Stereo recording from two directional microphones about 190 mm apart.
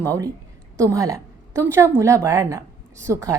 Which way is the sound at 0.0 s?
15° right (ahead or behind).